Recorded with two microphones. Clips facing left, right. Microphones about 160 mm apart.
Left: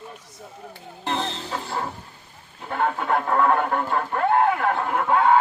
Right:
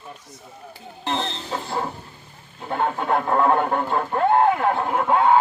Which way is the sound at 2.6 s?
25° right (ahead or behind).